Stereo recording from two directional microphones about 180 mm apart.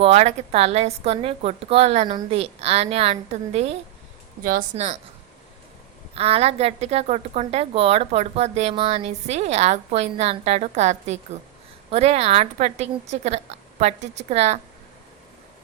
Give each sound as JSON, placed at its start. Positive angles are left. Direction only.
{"t": 0.0, "sound": "a woman's voice", "side_deg": -40}
{"t": 6.1, "sound": "a woman's voice", "side_deg": -35}